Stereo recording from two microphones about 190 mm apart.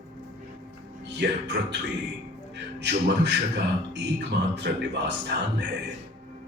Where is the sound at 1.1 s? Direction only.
65° right (ahead or behind).